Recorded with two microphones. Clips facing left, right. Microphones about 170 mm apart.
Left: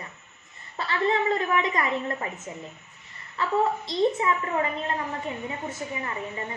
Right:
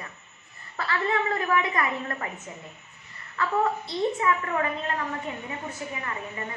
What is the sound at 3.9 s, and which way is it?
A woman's voice, 20° left (ahead or behind).